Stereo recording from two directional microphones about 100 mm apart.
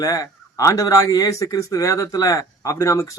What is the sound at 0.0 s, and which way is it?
Speech, 35° left (ahead or behind).